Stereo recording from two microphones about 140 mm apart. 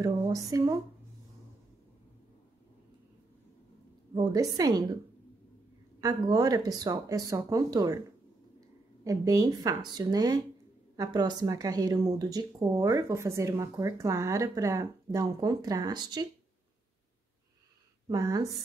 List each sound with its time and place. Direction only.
0.0 s speech: 25° right (ahead or behind)
4.1 s speech: 25° right (ahead or behind)
5.9 s speech: 25° right (ahead or behind)
18.0 s speech: 25° right (ahead or behind)